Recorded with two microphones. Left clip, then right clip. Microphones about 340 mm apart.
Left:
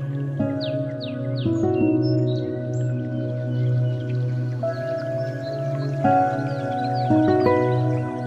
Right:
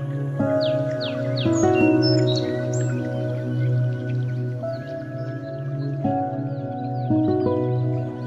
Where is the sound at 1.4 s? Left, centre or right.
Right.